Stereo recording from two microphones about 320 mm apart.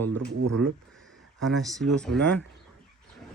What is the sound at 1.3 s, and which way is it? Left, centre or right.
Speech, centre.